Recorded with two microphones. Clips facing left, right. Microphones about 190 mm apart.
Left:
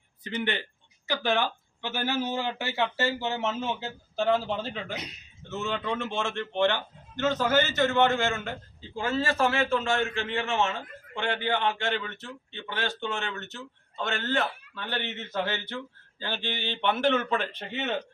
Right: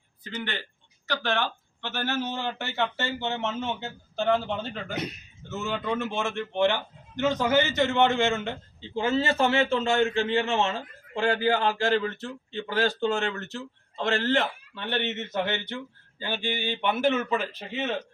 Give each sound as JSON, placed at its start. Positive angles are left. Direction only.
{"t": 0.3, "sound": "a man's voice", "side_deg": 20}